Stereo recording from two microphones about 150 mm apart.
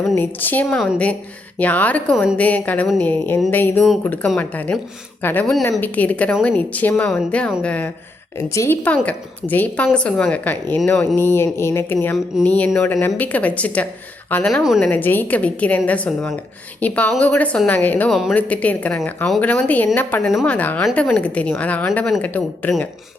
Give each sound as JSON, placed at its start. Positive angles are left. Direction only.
{"t": 0.2, "sound": "a woman's voice", "side_deg": 10}
{"t": 18.1, "sound": "speech", "side_deg": 0}
{"t": 18.3, "sound": "a woman's voice", "side_deg": 10}